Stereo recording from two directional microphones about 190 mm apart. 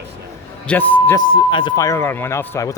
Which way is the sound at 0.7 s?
10° left (ahead or behind).